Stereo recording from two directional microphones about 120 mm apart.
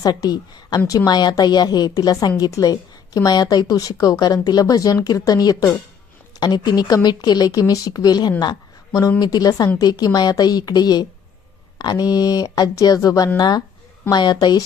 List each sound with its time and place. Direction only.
0.0 s speech: 30° left (ahead or behind)